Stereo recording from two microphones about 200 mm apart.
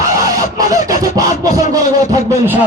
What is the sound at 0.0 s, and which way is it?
Fowl, 15° right (ahead or behind).